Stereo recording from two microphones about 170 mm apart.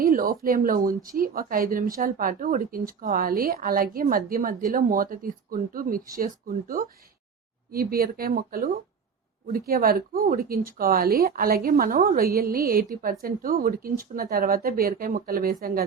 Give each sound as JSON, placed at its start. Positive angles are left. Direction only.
{"t": 0.0, "sound": "speech", "side_deg": -60}